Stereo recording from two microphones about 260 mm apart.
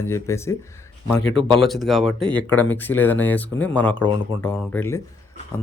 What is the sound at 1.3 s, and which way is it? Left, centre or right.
Speech, centre.